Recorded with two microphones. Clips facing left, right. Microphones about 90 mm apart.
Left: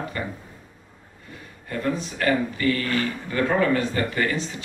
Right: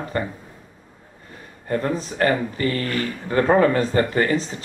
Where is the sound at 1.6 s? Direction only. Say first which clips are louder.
Right 3 dB; 35° right (ahead or behind).